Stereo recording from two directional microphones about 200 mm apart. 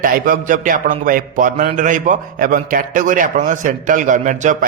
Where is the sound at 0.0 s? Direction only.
45° right (ahead or behind).